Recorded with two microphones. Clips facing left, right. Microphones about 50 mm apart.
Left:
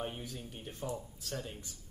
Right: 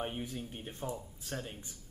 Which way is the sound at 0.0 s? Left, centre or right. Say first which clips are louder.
Right 2 dB; right.